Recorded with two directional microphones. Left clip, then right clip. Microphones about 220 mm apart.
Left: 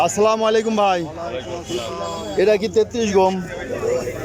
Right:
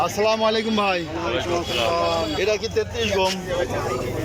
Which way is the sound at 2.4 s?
20° left (ahead or behind).